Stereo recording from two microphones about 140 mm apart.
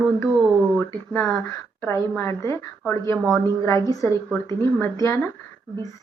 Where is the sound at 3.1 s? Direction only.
Centre (ahead or behind).